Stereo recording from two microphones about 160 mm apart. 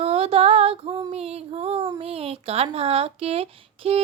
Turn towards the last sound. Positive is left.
turn(degrees=-35)  # may be behind; listen again after turning